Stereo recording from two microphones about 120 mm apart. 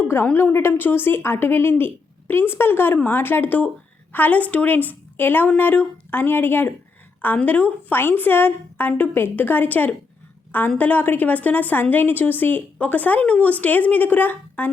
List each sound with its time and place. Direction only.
0.3 s a woman's voice: 15° left (ahead or behind)